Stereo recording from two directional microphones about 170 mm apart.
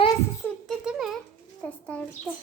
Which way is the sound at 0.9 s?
Centre (ahead or behind).